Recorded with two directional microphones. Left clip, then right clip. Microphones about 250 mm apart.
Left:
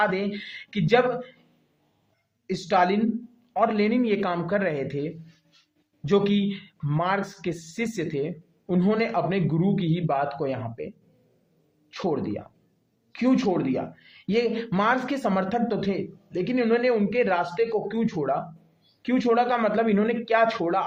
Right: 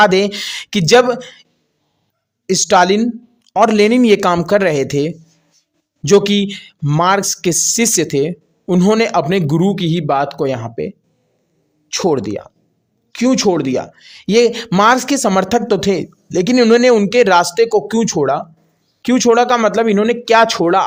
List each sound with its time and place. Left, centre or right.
0.0 s speech: right
2.5 s speech: right